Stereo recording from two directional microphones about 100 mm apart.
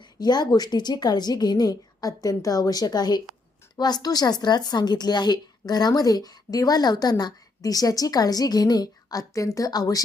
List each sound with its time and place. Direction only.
0.2 s a woman's voice: 45° left (ahead or behind)